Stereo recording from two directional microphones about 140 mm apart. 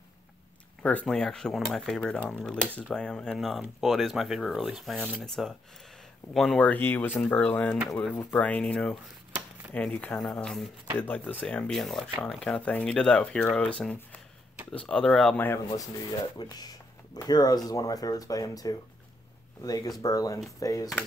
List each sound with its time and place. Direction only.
0.8 s speech: 5° left (ahead or behind)
15.3 s speech: 15° left (ahead or behind)
16.3 s speech: 30° left (ahead or behind)